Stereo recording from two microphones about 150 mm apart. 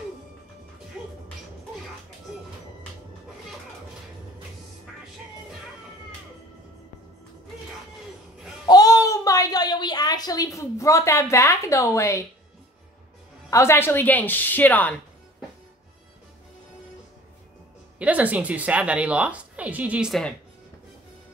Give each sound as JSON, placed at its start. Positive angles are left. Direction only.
{"t": 8.6, "sound": "a sound", "side_deg": 25}
{"t": 13.5, "sound": "a woman's voice", "side_deg": 20}
{"t": 17.9, "sound": "speech", "side_deg": -10}